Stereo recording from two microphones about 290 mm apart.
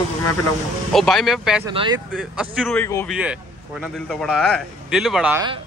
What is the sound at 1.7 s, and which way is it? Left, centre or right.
Speech, centre.